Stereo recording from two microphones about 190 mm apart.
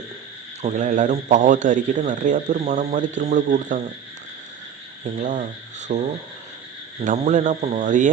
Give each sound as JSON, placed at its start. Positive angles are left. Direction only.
{"t": 0.6, "sound": "a man's voice", "side_deg": -40}
{"t": 5.0, "sound": "a man's voice", "side_deg": -40}